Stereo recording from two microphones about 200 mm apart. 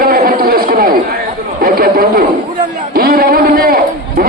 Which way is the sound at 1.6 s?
50° right (ahead or behind).